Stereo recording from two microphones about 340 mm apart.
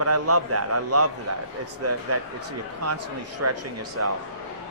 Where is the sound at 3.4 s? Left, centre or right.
Right.